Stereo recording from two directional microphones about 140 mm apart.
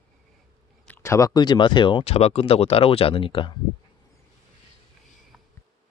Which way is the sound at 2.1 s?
45° left (ahead or behind).